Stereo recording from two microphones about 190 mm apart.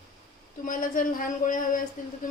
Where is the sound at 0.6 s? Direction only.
45° left (ahead or behind).